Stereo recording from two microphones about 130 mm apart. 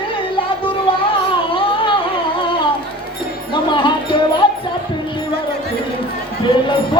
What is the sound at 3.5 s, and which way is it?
Music, 40° left (ahead or behind).